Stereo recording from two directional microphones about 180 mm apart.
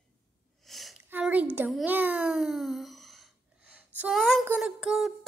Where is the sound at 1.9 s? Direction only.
10° right (ahead or behind).